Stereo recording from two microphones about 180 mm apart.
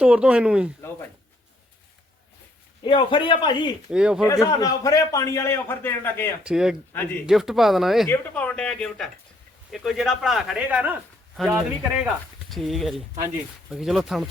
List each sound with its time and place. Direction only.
0.0 s speech: 5° right (ahead or behind)
2.8 s speech: 30° left (ahead or behind)
3.9 s speech: 5° right (ahead or behind)
4.3 s a man's voice: 20° left (ahead or behind)
6.4 s speech: 5° right (ahead or behind)
8.0 s speech: 10° left (ahead or behind)